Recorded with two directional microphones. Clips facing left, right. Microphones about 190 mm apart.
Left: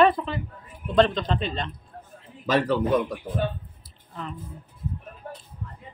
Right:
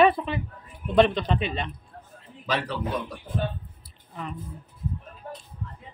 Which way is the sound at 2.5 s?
45° left (ahead or behind).